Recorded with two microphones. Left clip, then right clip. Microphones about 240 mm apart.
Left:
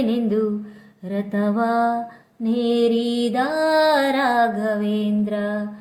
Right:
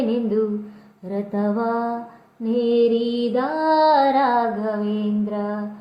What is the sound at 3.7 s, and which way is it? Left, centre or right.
Music, left.